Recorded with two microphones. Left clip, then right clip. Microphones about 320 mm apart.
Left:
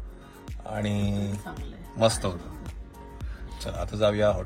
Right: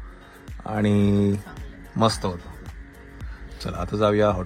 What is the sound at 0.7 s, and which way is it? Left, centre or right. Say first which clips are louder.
Speech: right 8 dB; right.